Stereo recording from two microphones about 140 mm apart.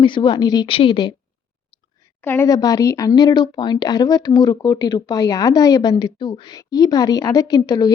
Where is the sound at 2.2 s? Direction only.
15° left (ahead or behind).